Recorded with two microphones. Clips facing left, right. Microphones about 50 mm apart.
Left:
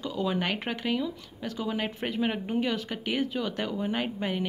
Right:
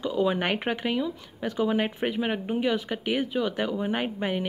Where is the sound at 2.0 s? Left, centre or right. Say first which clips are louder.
Right 2 dB; centre.